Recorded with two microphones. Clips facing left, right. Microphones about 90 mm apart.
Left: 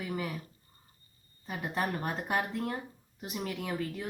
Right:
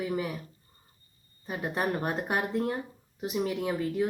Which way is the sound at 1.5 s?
20° right (ahead or behind).